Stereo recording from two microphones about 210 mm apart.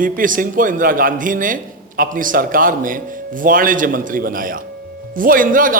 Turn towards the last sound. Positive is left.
turn(degrees=-40)  # may be behind; listen again after turning